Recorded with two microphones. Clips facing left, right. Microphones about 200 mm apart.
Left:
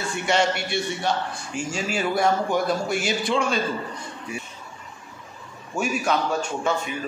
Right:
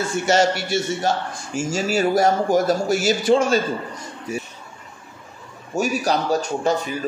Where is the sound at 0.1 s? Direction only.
40° right (ahead or behind).